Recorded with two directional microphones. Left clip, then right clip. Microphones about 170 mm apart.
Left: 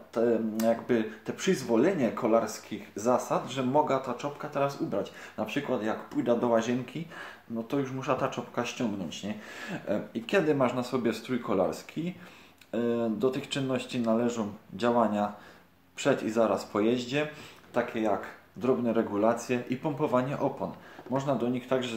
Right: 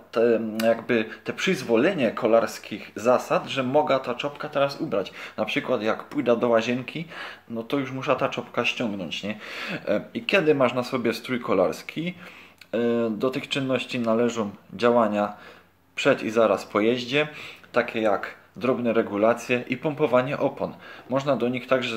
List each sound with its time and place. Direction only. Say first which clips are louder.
0.1 s speech: right 6 dB; 10° right (ahead or behind)
16.3 s speech: right 6 dB; 15° right (ahead or behind)